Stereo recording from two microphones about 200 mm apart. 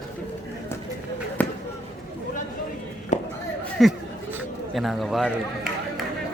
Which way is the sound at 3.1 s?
35° left (ahead or behind).